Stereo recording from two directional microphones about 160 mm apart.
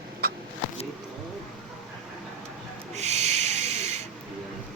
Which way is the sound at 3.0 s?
45° right (ahead or behind).